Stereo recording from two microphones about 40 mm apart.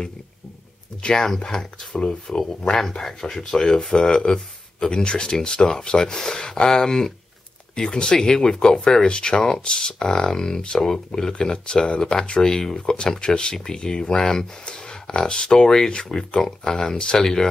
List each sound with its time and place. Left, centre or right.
1.2 s speech: centre